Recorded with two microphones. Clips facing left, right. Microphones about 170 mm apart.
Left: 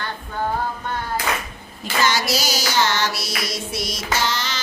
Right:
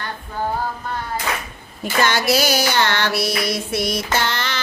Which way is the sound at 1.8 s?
55° right (ahead or behind).